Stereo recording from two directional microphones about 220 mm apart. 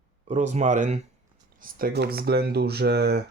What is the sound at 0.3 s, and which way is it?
Speech, 30° right (ahead or behind).